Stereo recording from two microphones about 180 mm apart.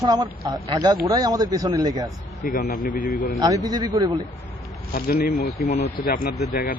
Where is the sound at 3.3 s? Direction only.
20° right (ahead or behind).